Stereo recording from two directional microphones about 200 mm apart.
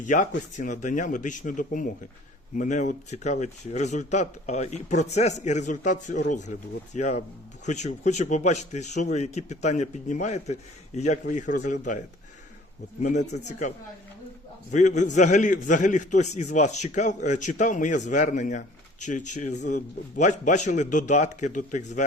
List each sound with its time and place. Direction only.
0.1 s a man's voice: 40° left (ahead or behind)
13.4 s a man's voice: 40° left (ahead or behind)